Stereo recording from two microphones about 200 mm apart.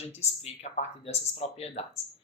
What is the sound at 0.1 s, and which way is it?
Speech, 30° left (ahead or behind).